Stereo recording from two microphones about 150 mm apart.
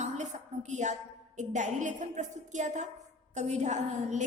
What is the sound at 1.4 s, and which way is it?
A woman's voice, 55° right (ahead or behind).